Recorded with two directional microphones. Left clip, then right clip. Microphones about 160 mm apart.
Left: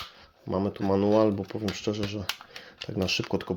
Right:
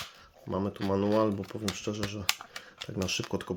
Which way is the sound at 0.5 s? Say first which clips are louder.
Left 4 dB; 20° left (ahead or behind).